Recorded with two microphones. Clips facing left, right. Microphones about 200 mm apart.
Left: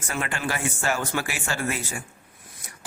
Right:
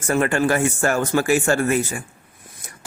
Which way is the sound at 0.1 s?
50° right (ahead or behind).